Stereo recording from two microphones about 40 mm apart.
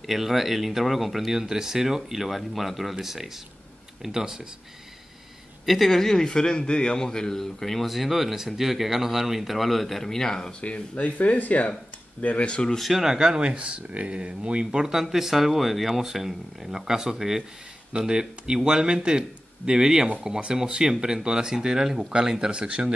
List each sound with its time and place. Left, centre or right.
0.0 s a man's voice: centre
5.7 s a man's voice: centre
10.6 s speech: left
12.7 s a man's voice: centre
13.0 s speech: centre
15.0 s speech: centre
22.5 s speech: right